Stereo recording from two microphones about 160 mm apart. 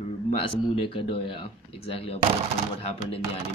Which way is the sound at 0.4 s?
35° left (ahead or behind).